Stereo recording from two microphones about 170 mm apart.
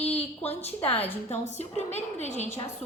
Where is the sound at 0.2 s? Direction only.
35° left (ahead or behind).